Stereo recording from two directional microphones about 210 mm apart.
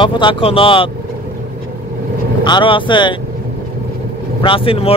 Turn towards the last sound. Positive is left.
turn(degrees=25)  # may be behind; listen again after turning